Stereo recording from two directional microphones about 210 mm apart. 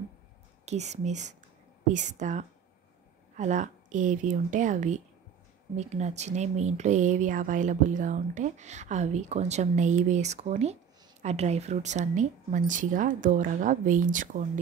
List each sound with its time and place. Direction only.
0.7 s speech: 30° right (ahead or behind)